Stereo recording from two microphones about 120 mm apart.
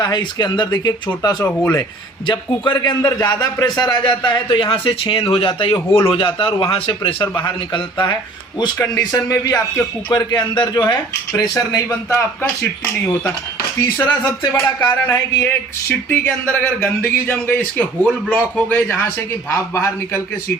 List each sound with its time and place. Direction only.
0.0 s a man's voice: 35° left (ahead or behind)
1.5 s speech: 10° left (ahead or behind)
2.2 s a man's voice: 40° left (ahead or behind)
8.8 s speech: 30° left (ahead or behind)
10.2 s a man's voice: 40° left (ahead or behind)
12.1 s speech: 15° left (ahead or behind)